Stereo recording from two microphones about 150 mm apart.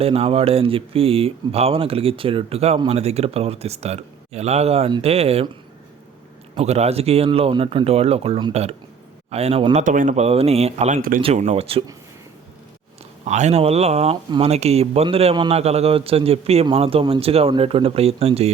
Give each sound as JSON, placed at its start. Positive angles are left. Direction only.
{"t": 0.0, "sound": "speech", "side_deg": -40}
{"t": 6.6, "sound": "speech", "side_deg": -45}
{"t": 9.8, "sound": "speech", "side_deg": -60}
{"t": 10.2, "sound": "speech", "side_deg": -40}
{"t": 13.2, "sound": "speech", "side_deg": -50}